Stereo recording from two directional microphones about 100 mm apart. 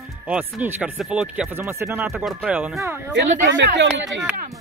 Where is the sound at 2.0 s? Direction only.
10° right (ahead or behind).